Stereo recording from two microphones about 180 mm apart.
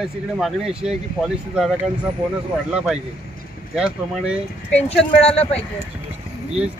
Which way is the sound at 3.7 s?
5° right (ahead or behind).